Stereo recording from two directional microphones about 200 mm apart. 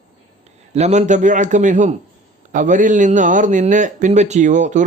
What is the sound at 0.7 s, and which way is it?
A man's voice, 35° right (ahead or behind).